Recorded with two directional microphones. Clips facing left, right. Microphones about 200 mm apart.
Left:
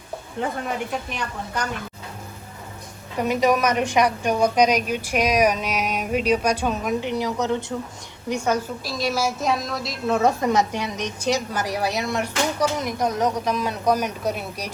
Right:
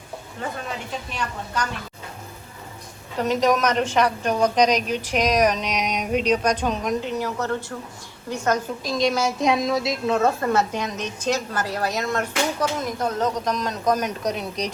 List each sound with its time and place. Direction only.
3.2 s a woman's voice: 10° left (ahead or behind)
10.2 s a woman's voice: 15° left (ahead or behind)